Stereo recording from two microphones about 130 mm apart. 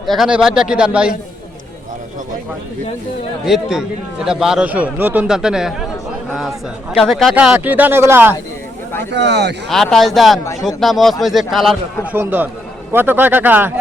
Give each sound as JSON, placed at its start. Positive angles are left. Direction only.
{"t": 0.0, "sound": "a man's voice", "side_deg": 0}
{"t": 3.4, "sound": "a man's voice", "side_deg": -5}
{"t": 6.9, "sound": "a man's voice", "side_deg": 0}
{"t": 7.3, "sound": "speech", "side_deg": -15}
{"t": 9.6, "sound": "a man's voice", "side_deg": 0}
{"t": 12.1, "sound": "speech", "side_deg": -15}